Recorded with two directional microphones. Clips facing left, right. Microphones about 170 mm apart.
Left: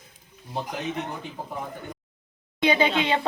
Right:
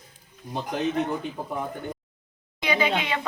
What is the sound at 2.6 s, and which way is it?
Speech, 30° left (ahead or behind).